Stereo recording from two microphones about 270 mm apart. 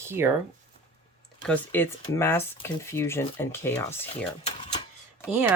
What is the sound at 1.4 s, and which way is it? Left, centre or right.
Speech, centre.